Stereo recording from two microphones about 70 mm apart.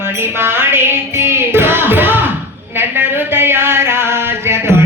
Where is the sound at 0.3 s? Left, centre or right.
Right.